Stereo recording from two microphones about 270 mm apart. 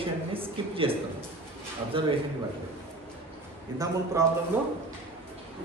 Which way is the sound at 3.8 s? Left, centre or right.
Centre.